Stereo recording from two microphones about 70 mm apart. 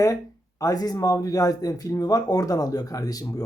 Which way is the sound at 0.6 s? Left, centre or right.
Left.